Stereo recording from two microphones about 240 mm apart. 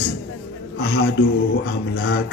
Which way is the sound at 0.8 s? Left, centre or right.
Left.